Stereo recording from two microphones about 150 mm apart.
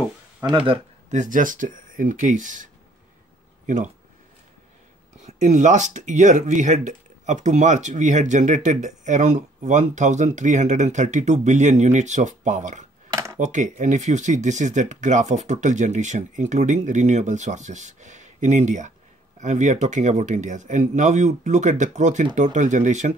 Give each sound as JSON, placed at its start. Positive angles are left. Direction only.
{"t": 1.1, "sound": "speech", "side_deg": -60}
{"t": 5.2, "sound": "speech", "side_deg": -55}
{"t": 13.1, "sound": "a sound", "side_deg": -20}
{"t": 13.4, "sound": "speech", "side_deg": -55}